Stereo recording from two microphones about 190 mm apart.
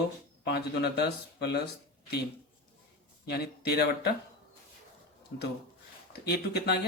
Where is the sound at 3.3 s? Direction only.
60° left (ahead or behind).